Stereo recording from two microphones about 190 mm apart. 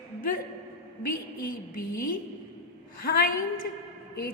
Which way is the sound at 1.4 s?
45° left (ahead or behind).